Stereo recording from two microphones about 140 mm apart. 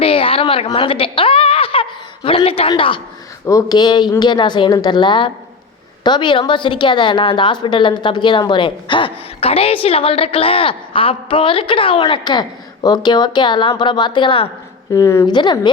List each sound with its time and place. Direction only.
0.0 s a woman's voice: 40° left (ahead or behind)
3.4 s a woman's voice: 25° left (ahead or behind)
14.9 s a woman's voice: 20° left (ahead or behind)
15.3 s a woman's voice: 35° left (ahead or behind)